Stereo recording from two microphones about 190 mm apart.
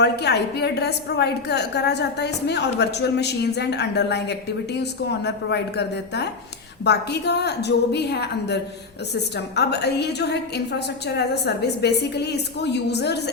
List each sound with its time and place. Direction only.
0.0 s a woman's voice: 60° left (ahead or behind)